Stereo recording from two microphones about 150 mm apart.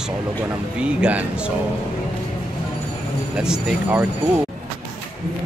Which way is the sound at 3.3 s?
5° right (ahead or behind).